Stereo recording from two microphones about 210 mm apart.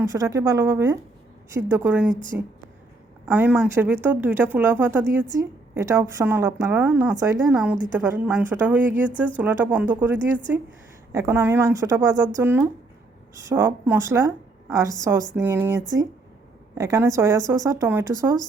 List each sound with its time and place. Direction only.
0.0 s a woman's voice: 15° right (ahead or behind)
3.3 s a woman's voice: 5° right (ahead or behind)